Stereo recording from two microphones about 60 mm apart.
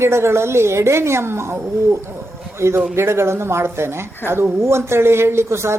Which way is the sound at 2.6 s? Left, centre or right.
Right.